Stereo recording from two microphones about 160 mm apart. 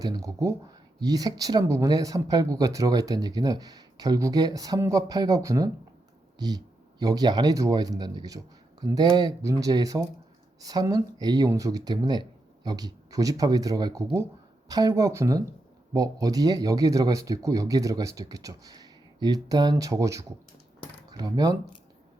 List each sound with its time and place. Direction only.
0.0 s speech: 20° right (ahead or behind)